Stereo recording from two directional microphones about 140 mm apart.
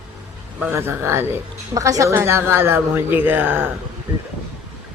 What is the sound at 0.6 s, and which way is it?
Speech, 15° right (ahead or behind).